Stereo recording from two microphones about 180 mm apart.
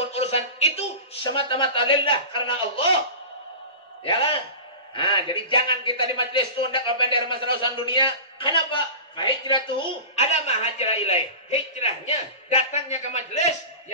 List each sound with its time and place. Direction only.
0.1 s a sound: 35° left (ahead or behind)
1.3 s a man's voice: 30° left (ahead or behind)
4.0 s a man's voice: 30° left (ahead or behind)